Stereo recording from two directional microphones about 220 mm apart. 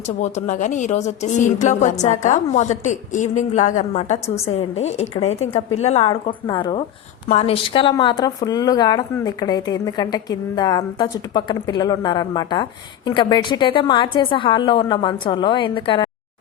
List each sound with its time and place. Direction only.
0.2 s speech: 35° left (ahead or behind)